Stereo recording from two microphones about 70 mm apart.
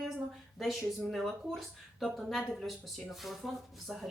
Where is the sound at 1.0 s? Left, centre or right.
Centre.